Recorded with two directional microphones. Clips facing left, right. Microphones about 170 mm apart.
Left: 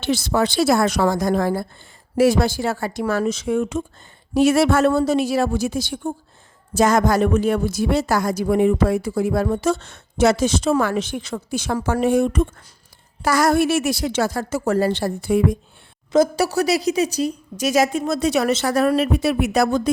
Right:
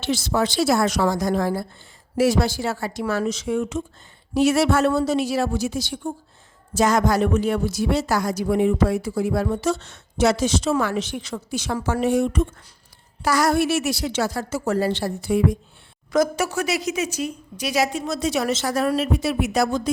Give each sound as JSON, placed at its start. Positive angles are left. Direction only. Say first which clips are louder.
{"t": 0.0, "sound": "a woman's voice", "louder": "left 2 dB", "side_deg": 60}
{"t": 16.1, "sound": "speech", "louder": "left 4 dB", "side_deg": 30}